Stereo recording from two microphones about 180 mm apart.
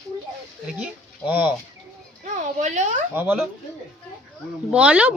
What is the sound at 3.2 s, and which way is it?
Speech, 10° right (ahead or behind).